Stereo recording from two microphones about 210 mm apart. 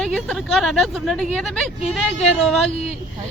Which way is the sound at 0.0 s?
5° left (ahead or behind).